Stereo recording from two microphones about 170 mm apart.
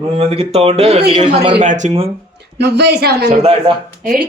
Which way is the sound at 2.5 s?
80° right.